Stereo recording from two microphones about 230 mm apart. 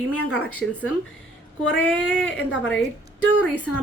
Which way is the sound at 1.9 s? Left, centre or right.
Centre.